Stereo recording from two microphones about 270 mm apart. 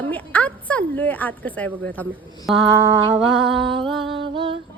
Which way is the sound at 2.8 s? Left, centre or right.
Centre.